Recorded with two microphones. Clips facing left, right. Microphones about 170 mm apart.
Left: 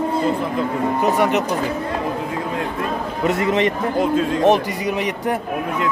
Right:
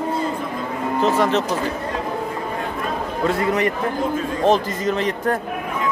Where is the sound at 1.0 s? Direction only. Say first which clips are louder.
Right 1 dB; 15° left (ahead or behind).